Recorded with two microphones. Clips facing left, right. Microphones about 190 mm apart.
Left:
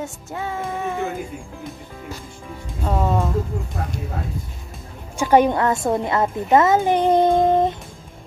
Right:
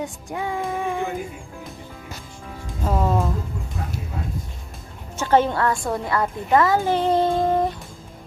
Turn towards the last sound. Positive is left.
turn(degrees=20)  # may be behind; listen again after turning